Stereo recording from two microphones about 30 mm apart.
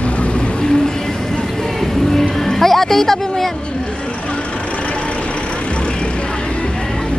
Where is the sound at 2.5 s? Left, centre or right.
Centre.